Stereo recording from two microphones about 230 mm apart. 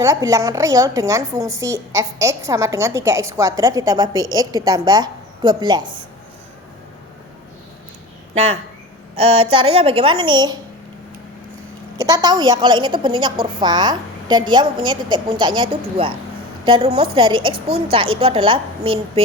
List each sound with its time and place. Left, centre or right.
0.0 s a woman's voice: centre
9.1 s a woman's voice: right
11.9 s a woman's voice: centre